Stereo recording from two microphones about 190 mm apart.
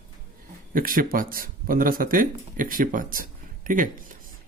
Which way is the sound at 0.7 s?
50° right (ahead or behind).